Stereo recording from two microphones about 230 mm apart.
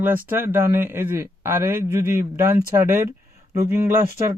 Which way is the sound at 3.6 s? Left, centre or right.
Centre.